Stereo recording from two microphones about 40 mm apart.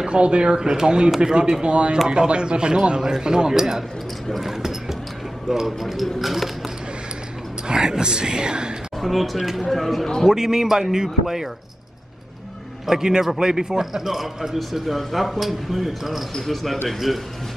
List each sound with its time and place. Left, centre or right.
0.0 s a man's voice: right; by 6.5 s centre
7.6 s speech: centre
9.0 s a man's voice: centre
10.2 s a man's voice: centre
12.8 s a man's voice: centre